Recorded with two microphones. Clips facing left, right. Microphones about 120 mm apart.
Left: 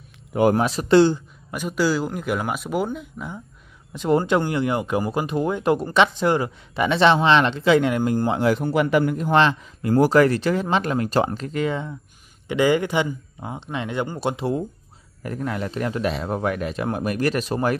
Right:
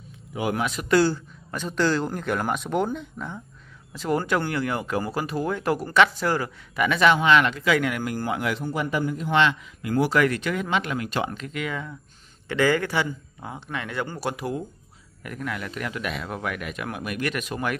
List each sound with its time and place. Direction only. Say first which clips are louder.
0.3 s speech: left 9 dB; 50° left (ahead or behind)
0.6 s a man's voice: left 2 dB; 35° left (ahead or behind); by 3.3 s 5° left (ahead or behind)
3.9 s speech: left 5 dB; 20° left (ahead or behind)
8.5 s speech: left 7 dB; 65° left (ahead or behind); by 11.9 s 30° left (ahead or behind)
12.4 s speech: left 3 dB; 15° left (ahead or behind); by 17.7 s 35° left (ahead or behind)